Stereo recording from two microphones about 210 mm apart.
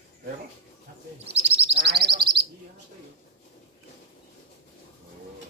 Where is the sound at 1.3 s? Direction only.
30° right (ahead or behind).